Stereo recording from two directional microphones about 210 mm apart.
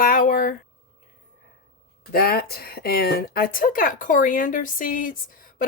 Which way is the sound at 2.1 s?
50° left (ahead or behind).